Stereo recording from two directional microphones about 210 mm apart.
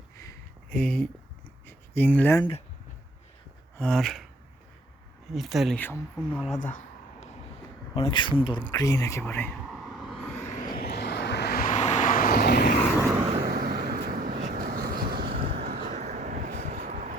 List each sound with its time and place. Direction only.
0.2 s a sound: 15° left (ahead or behind)
0.8 s speech: 5° left (ahead or behind)
1.6 s a sound: 10° left (ahead or behind)
3.8 s speech: 5° left (ahead or behind)
5.3 s speech: centre (ahead or behind)
6.5 s a sound: 40° left (ahead or behind)
7.9 s speech: 25° left (ahead or behind)
9.6 s vehicle: centre (ahead or behind)
10.8 s vehicle: 50° left (ahead or behind)
13.0 s vehicle: 15° right (ahead or behind)
13.4 s vehicle: 45° right (ahead or behind)
15.6 s vehicle: 30° right (ahead or behind)